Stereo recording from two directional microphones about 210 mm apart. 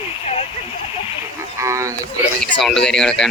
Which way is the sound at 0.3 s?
30° left (ahead or behind).